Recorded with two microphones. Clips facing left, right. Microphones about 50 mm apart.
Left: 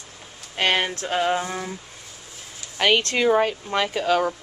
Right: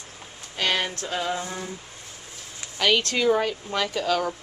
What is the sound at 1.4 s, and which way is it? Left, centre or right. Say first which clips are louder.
Speech: left 4 dB; left.